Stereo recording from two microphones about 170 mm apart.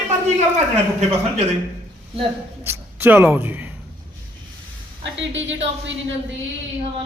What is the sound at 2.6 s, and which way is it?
Speech, 10° right (ahead or behind).